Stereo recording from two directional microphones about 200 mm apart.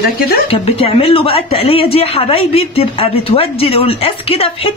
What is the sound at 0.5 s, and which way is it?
A woman's voice, 30° left (ahead or behind).